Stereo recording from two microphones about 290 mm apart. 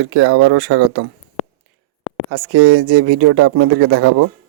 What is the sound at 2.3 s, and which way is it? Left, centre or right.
Speech, right.